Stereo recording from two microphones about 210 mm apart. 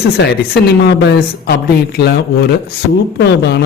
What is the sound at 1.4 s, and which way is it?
Speech, 50° left (ahead or behind).